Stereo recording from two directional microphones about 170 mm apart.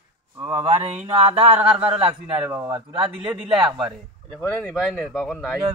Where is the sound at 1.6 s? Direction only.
10° right (ahead or behind).